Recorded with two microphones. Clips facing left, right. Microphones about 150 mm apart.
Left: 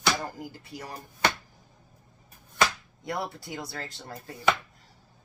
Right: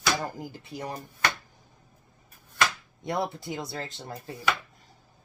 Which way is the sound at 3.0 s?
20° right (ahead or behind).